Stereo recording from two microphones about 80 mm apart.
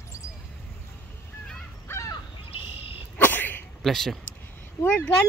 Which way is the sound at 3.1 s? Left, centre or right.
Left.